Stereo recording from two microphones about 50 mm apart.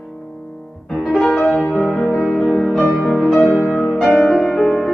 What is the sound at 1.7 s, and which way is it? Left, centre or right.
Music, left.